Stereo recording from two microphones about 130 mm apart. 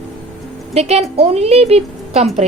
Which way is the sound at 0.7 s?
55° right (ahead or behind).